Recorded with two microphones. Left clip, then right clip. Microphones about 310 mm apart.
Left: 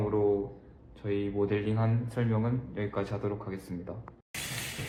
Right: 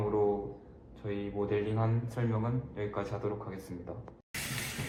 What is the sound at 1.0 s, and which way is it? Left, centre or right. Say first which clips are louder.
A man's voice: left 5 dB; left.